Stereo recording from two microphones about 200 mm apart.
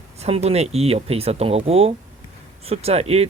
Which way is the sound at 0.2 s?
30° right (ahead or behind).